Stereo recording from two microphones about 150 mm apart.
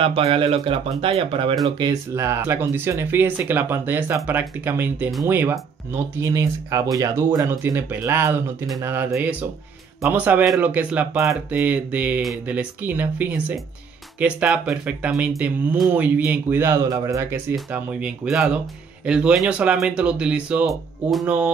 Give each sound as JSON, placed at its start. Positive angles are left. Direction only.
{"t": 0.0, "sound": "speech", "side_deg": -40}
{"t": 1.8, "sound": "speech", "side_deg": -20}